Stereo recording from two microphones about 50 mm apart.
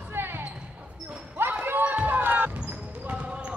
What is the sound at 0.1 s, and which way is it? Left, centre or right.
Basketball bounce, right.